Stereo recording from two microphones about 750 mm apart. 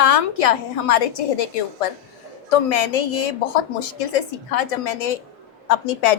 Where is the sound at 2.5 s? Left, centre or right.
Left.